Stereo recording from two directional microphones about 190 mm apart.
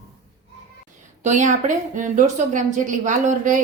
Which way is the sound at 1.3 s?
40° right (ahead or behind).